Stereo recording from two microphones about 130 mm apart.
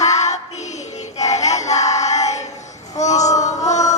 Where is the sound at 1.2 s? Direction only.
60° left (ahead or behind).